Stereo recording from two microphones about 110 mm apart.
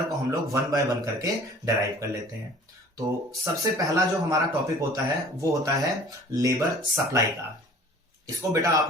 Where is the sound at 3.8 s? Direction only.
30° right (ahead or behind).